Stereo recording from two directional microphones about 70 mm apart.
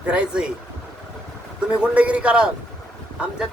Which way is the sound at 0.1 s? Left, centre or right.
Centre.